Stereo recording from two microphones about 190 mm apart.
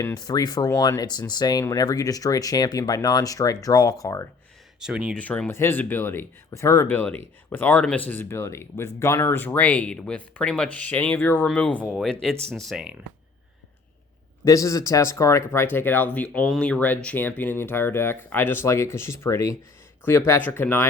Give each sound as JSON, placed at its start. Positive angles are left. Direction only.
{"t": 0.0, "sound": "speech", "side_deg": 20}
{"t": 4.8, "sound": "speech", "side_deg": -5}
{"t": 5.1, "sound": "speech", "side_deg": 5}
{"t": 14.4, "sound": "speech", "side_deg": 15}